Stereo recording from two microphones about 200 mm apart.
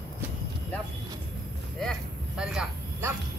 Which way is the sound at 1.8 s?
Centre (ahead or behind).